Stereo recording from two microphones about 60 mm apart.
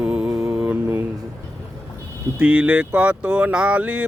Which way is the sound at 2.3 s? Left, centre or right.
Centre.